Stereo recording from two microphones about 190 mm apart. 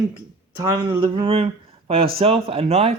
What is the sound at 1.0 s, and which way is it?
A man's voice, 30° right (ahead or behind).